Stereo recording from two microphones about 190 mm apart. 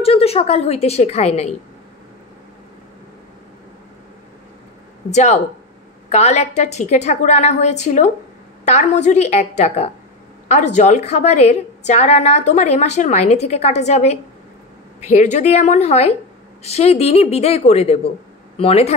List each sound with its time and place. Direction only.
0.0 s a woman's voice: 30° left (ahead or behind)
5.1 s a woman's voice: 35° left (ahead or behind)